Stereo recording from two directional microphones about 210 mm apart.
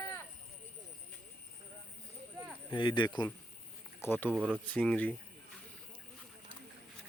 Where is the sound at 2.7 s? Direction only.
20° left (ahead or behind).